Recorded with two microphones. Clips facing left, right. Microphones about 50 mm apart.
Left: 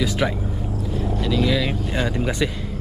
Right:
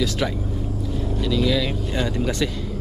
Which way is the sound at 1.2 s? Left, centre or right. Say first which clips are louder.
Even; centre.